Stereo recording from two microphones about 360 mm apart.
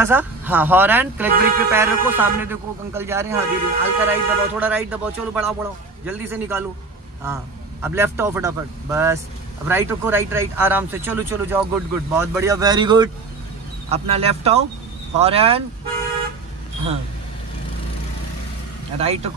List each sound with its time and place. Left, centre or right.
0.0 s speech: centre
7.8 s speech: centre
18.9 s speech: centre